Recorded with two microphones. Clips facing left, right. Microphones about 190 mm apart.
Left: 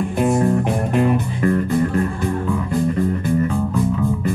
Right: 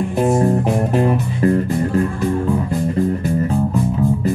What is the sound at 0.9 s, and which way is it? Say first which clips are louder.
Music: right 1 dB; 30° right (ahead or behind).